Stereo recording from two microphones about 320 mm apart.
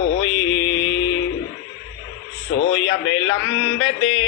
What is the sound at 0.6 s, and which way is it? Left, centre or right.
Music, centre.